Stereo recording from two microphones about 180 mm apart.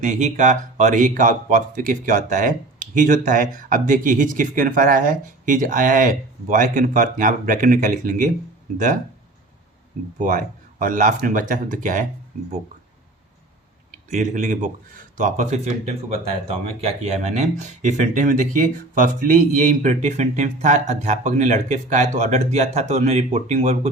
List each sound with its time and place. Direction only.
0.0 s speech: 40° right (ahead or behind)
10.2 s speech: 45° right (ahead or behind)
13.9 s speech: 45° right (ahead or behind)